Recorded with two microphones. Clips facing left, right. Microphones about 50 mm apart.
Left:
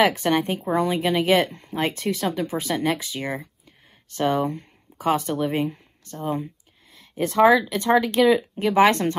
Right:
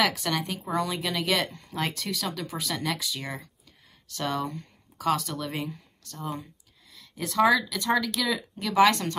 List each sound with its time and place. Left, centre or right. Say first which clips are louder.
0.0 s speech: left 7 dB; left
6.2 s a sound: left 8 dB; left
7.7 s speech: left 7 dB; left